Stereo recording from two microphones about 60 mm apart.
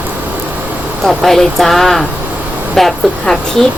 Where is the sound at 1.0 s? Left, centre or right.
Centre.